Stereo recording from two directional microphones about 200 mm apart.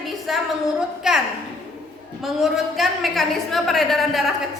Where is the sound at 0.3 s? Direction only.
Centre (ahead or behind).